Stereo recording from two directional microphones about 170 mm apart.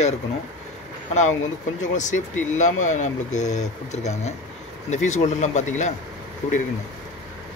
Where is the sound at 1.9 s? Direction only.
45° left (ahead or behind).